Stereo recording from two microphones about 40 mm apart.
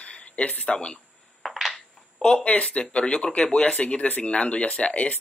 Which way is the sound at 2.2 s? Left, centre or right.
Left.